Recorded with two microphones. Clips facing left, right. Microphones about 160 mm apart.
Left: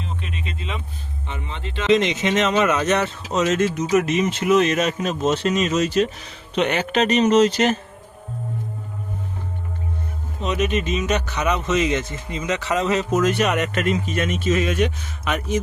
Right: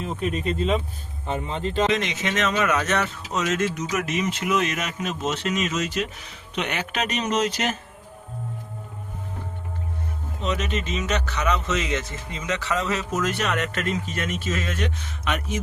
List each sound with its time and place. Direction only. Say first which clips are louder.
0.0 s speech: right 6 dB; 45° right (ahead or behind)
1.9 s speech: left 7 dB; 25° left (ahead or behind)
10.4 s a man's voice: left 5 dB; 15° left (ahead or behind)
15.3 s speech: left 4 dB; centre (ahead or behind)